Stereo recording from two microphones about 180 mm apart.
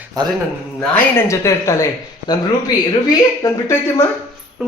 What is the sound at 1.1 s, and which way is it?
Speech, 15° left (ahead or behind).